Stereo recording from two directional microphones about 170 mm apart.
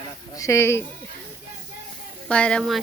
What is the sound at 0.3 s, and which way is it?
Speech, 15° left (ahead or behind).